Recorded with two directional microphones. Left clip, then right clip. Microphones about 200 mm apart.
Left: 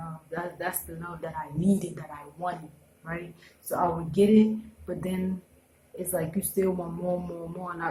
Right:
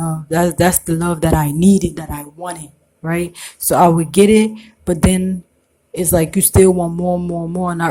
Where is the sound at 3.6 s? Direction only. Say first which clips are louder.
Right 16 dB; 45° right (ahead or behind).